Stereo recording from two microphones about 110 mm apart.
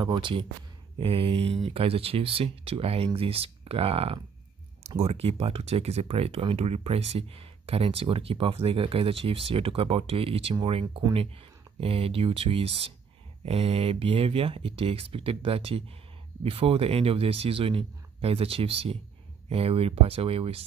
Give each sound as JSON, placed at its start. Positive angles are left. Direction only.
{"t": 0.0, "sound": "speech", "side_deg": -45}